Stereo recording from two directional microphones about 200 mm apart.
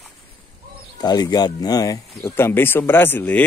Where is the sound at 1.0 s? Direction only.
20° left (ahead or behind).